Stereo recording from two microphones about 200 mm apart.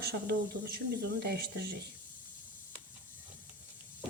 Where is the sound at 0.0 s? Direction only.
55° right (ahead or behind).